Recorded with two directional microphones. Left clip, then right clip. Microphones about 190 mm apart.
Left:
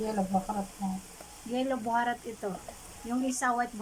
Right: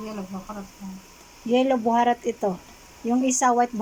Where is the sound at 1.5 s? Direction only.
20° right (ahead or behind).